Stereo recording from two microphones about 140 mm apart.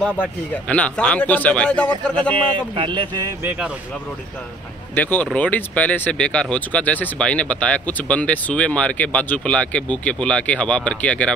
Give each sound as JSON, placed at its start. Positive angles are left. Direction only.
{"t": 0.0, "sound": "speech", "side_deg": 10}
{"t": 2.3, "sound": "speech", "side_deg": -40}
{"t": 3.4, "sound": "speech", "side_deg": -5}
{"t": 4.9, "sound": "speech", "side_deg": 15}